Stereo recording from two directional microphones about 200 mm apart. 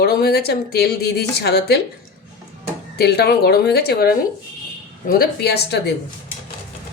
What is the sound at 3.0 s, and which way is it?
A woman's voice, 55° left (ahead or behind).